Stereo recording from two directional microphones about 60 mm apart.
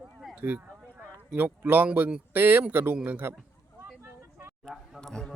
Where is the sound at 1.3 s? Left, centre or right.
Right.